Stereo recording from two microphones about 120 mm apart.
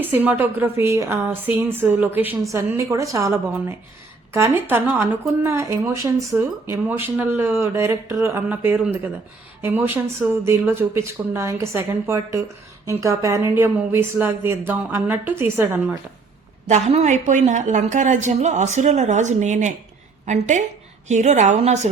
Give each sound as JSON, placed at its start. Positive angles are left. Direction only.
{"t": 0.0, "sound": "a woman's voice", "side_deg": -15}
{"t": 16.9, "sound": "a woman's voice", "side_deg": -75}